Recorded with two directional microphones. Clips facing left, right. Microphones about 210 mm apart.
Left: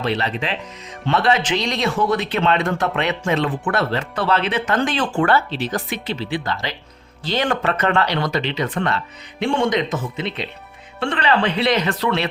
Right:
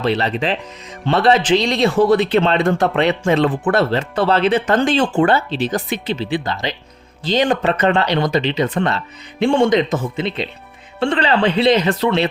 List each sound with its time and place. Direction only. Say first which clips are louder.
0.0 s speech: right 4 dB; 35° right (ahead or behind)